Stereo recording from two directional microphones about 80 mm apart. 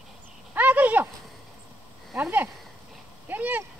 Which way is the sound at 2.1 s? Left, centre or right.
Right.